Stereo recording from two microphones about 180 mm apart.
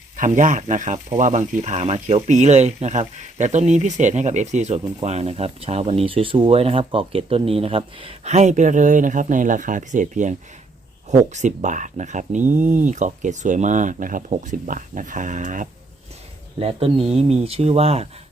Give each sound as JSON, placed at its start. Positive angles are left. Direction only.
{"t": 0.2, "sound": "speech", "side_deg": -45}
{"t": 16.6, "sound": "speech", "side_deg": -35}